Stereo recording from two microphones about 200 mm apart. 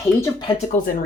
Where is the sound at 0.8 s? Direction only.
40° left (ahead or behind).